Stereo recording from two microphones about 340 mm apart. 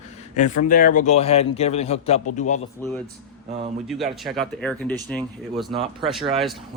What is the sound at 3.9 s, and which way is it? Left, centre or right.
Speech, centre.